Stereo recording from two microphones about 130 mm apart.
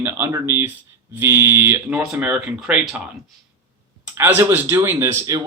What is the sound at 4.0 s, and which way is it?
Speech, 15° right (ahead or behind).